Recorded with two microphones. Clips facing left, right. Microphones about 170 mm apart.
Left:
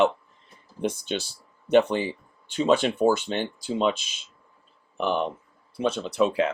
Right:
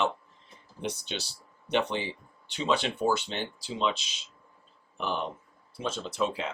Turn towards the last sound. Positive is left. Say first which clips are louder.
# left 8 dB
turn(degrees=65)  # may be behind; listen again after turning